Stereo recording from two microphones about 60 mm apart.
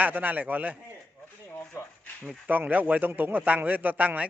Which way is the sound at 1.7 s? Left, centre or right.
Left.